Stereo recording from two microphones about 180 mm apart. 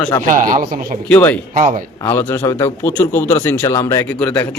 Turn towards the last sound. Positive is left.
turn(degrees=10)  # may be behind; listen again after turning